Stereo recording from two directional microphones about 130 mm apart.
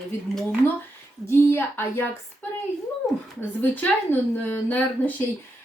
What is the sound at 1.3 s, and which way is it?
Speech, 20° left (ahead or behind).